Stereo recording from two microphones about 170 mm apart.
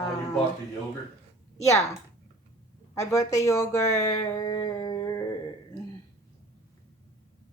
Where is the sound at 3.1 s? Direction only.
20° left (ahead or behind).